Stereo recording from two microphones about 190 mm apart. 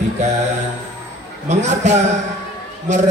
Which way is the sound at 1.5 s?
40° right (ahead or behind).